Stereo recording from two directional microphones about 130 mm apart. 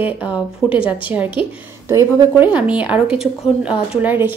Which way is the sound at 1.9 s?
20° right (ahead or behind).